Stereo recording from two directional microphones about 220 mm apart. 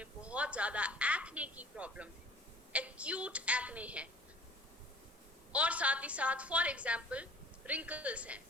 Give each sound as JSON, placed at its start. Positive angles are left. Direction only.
{"t": 0.0, "sound": "a woman's voice", "side_deg": -5}
{"t": 5.5, "sound": "a woman's voice", "side_deg": -5}